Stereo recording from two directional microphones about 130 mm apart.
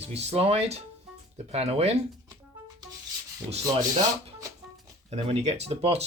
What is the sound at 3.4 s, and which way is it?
Rub, 15° right (ahead or behind).